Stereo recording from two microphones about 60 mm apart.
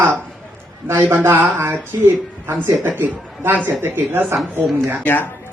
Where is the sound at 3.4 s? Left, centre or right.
Right.